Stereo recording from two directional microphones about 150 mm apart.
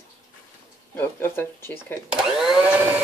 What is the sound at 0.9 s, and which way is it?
Speech, 15° left (ahead or behind).